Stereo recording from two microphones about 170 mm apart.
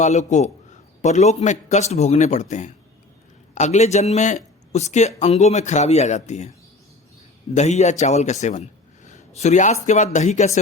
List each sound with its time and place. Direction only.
0.0 s a man's voice: 40° left (ahead or behind)
7.5 s a man's voice: 40° left (ahead or behind)
9.0 s a sound: 45° left (ahead or behind)
9.8 s a man's voice: 45° left (ahead or behind)